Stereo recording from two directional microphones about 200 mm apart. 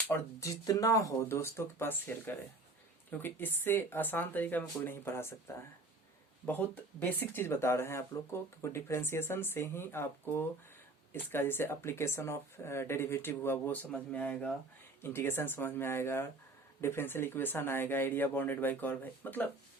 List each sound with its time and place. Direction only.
0.1 s speech: 15° left (ahead or behind)
6.4 s speech: 10° left (ahead or behind)